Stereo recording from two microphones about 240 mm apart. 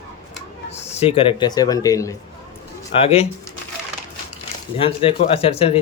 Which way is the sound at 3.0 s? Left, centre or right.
Left.